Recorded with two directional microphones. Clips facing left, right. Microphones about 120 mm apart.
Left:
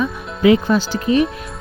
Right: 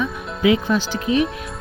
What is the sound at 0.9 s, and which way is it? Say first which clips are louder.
Speech: left 3 dB; centre (ahead or behind).